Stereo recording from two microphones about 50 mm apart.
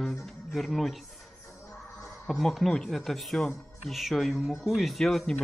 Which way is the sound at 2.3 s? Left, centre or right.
Centre.